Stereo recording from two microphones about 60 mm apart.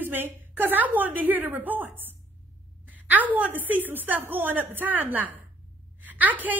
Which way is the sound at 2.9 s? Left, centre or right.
Right.